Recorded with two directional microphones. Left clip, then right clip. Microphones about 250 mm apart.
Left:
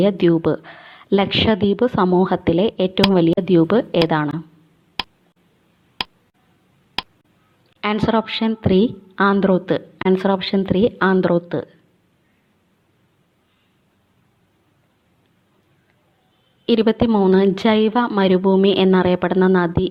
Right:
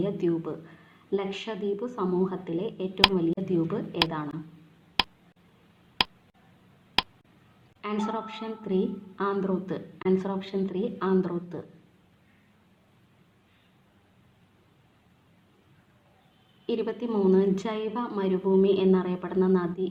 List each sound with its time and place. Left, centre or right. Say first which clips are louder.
0.0 s a woman's voice: left 12 dB; left
5.0 s a sound: even; centre
7.8 s a woman's voice: left 12 dB; left
16.6 s a woman's voice: left 13 dB; left